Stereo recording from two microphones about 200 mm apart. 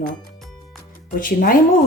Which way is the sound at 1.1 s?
45° left (ahead or behind).